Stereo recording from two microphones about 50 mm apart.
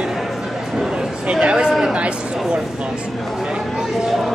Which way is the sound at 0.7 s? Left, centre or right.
Centre.